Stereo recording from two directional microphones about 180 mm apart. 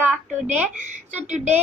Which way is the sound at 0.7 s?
40° right (ahead or behind).